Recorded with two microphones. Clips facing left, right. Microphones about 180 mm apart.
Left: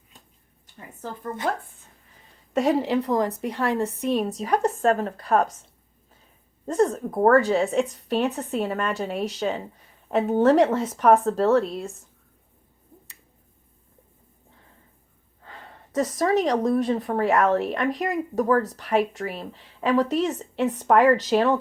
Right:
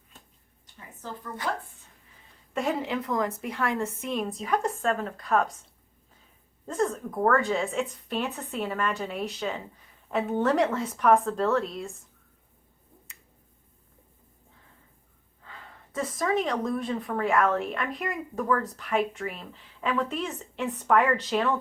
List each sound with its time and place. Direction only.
1.5 s speech: 50° left (ahead or behind)
2.5 s speech: 40° left (ahead or behind)
6.7 s speech: 40° left (ahead or behind)
15.4 s a woman's voice: 40° left (ahead or behind)